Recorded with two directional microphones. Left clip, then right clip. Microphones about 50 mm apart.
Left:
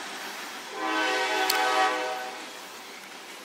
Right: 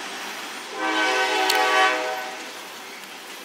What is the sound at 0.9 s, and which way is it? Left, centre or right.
Train, right.